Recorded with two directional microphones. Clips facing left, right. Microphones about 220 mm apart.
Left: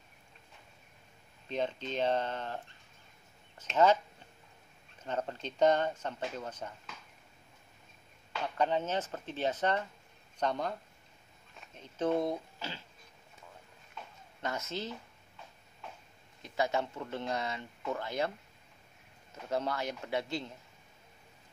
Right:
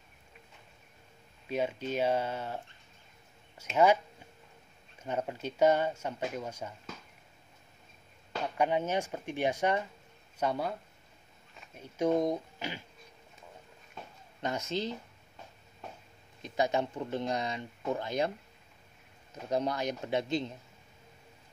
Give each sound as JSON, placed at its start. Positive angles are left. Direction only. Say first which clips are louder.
{"t": 1.5, "sound": "speech", "louder": "right 3 dB", "side_deg": -10}
{"t": 5.0, "sound": "speech", "louder": "right 2 dB", "side_deg": -10}
{"t": 8.5, "sound": "speech", "louder": "right 2 dB", "side_deg": -10}
{"t": 14.4, "sound": "speech", "louder": "right 4 dB", "side_deg": -15}
{"t": 16.4, "sound": "speech", "louder": "right 2 dB", "side_deg": -20}
{"t": 19.5, "sound": "speech", "louder": "right 3 dB", "side_deg": -15}